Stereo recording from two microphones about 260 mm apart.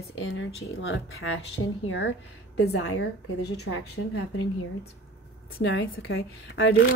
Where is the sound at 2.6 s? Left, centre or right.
Left.